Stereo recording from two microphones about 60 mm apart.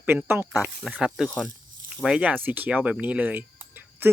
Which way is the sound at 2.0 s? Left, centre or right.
Centre.